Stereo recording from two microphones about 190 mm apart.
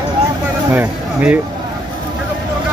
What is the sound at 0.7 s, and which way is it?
Speech, 10° right (ahead or behind).